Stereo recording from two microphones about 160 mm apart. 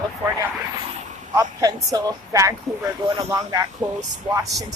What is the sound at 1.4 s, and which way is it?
Speech, 20° right (ahead or behind).